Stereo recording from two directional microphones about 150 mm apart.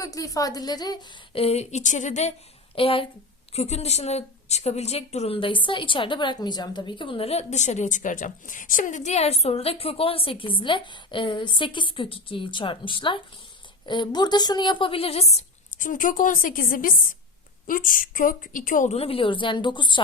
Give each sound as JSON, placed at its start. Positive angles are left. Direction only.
{"t": 0.0, "sound": "a woman's voice", "side_deg": 20}
{"t": 1.4, "sound": "a woman's voice", "side_deg": 45}
{"t": 2.7, "sound": "a woman's voice", "side_deg": 35}
{"t": 18.9, "sound": "a woman's voice", "side_deg": 40}